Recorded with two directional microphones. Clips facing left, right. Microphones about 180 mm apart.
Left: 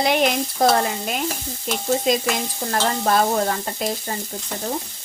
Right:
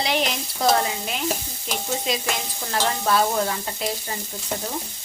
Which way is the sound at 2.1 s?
45° left (ahead or behind).